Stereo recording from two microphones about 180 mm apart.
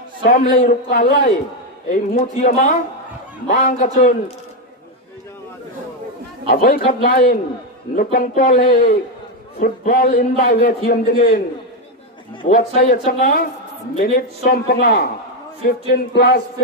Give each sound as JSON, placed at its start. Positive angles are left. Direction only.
{"t": 0.2, "sound": "a man's voice", "side_deg": 45}
{"t": 6.5, "sound": "a man's voice", "side_deg": 55}
{"t": 12.4, "sound": "a man's voice", "side_deg": 45}